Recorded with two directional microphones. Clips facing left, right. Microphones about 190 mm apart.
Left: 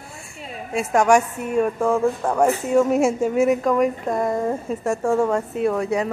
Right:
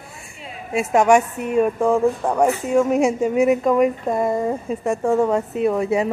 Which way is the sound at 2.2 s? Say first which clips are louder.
Right 1 dB; centre (ahead or behind).